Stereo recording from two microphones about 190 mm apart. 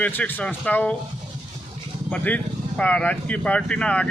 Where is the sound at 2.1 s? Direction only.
5° left (ahead or behind).